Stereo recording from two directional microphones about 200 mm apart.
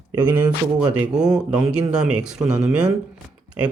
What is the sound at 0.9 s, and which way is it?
Speech, 5° right (ahead or behind).